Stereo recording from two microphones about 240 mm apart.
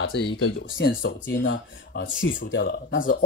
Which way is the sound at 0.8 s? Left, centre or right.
Left.